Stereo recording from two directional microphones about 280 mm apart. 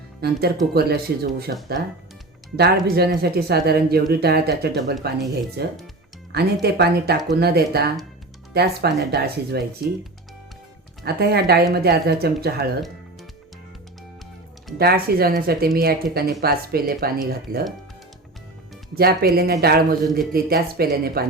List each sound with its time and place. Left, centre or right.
0.2 s speech: right
2.9 s speech: right
11.0 s speech: right
14.8 s speech: right
18.9 s speech: right